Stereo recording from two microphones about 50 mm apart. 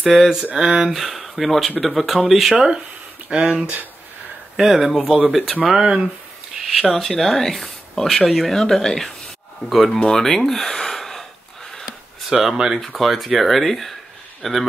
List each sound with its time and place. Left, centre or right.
0.0 s speech: centre
0.6 s speech: centre
3.3 s speech: right
4.6 s speech: centre
5.8 s speech: centre
6.6 s speech: centre
11.8 s a sound: centre
12.7 s a man's voice: centre